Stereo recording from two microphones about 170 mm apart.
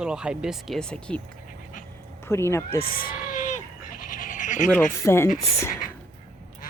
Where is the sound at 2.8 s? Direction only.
55° left (ahead or behind).